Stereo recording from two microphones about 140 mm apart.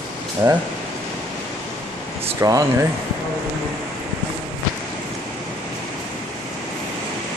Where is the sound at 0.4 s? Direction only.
25° right (ahead or behind).